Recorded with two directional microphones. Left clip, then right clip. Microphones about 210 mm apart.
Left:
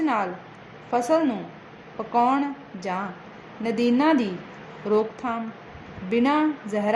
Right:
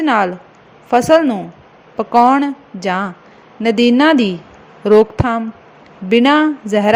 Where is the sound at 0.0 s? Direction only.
35° right (ahead or behind).